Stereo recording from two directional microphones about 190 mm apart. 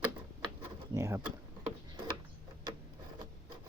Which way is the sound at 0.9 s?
15° right (ahead or behind).